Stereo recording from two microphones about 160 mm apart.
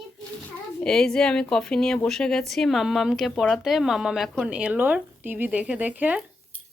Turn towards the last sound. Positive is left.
turn(degrees=-10)  # may be behind; listen again after turning